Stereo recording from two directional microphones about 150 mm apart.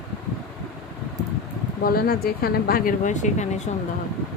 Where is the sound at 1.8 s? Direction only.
90° left; by 3.5 s 50° left (ahead or behind).